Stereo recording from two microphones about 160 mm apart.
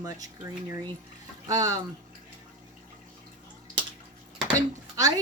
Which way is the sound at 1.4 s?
25° right (ahead or behind).